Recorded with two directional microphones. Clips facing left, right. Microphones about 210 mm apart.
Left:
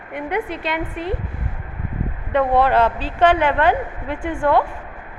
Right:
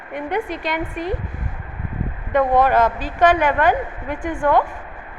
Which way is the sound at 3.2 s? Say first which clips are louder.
Even; 25° left (ahead or behind).